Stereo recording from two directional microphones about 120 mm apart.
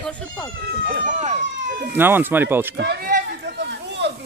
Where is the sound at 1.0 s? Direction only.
70° right (ahead or behind).